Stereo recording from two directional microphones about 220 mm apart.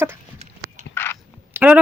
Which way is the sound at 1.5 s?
5° right (ahead or behind).